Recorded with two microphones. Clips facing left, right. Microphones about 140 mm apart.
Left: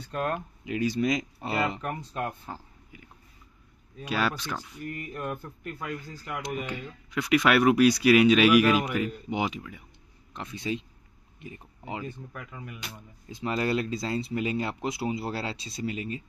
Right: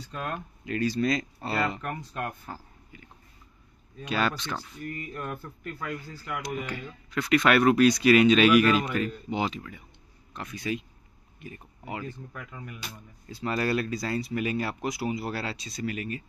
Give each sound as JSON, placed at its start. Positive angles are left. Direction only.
{"t": 0.0, "sound": "speech", "side_deg": 50}
{"t": 0.7, "sound": "speech", "side_deg": 15}
{"t": 5.1, "sound": "speech", "side_deg": 15}
{"t": 10.3, "sound": "speech", "side_deg": 25}
{"t": 12.3, "sound": "speech", "side_deg": 5}
{"t": 12.9, "sound": "speech", "side_deg": 20}